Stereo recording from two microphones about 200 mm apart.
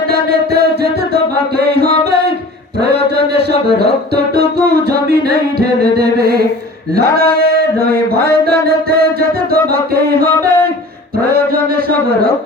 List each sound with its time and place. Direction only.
1.1 s music: 55° right (ahead or behind)
3.8 s music: 55° right (ahead or behind)
7.8 s a sound: 50° right (ahead or behind)
9.5 s music: 50° right (ahead or behind)